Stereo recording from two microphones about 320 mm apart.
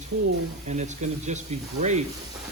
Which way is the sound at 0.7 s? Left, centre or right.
Right.